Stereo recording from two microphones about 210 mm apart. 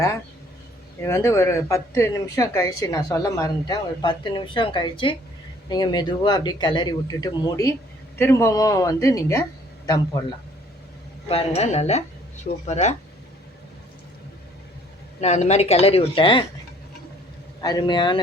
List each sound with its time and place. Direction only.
1.0 s speech: 10° left (ahead or behind)
11.3 s a woman's voice: 30° left (ahead or behind)
15.2 s speech: 30° left (ahead or behind)
17.6 s speech: 20° left (ahead or behind)